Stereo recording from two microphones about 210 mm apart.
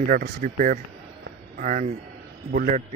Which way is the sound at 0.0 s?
40° right (ahead or behind).